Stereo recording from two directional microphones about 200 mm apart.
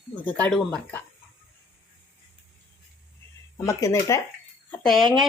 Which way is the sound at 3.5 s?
15° left (ahead or behind).